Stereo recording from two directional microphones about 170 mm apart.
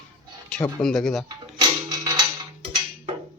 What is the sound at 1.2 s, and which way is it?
Music, 25° right (ahead or behind).